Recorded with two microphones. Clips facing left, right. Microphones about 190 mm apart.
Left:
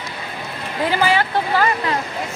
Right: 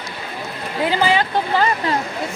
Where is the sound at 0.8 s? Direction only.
15° right (ahead or behind).